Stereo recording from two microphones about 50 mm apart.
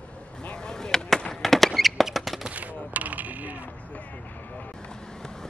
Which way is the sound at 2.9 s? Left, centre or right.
Right.